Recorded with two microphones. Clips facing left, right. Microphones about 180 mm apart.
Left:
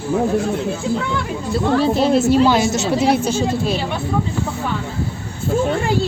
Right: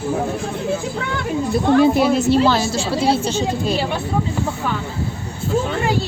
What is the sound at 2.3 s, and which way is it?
A woman's voice, 15° left (ahead or behind).